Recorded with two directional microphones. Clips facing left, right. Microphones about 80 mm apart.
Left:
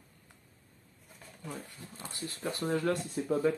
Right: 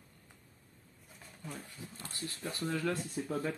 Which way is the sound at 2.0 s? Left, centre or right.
Left.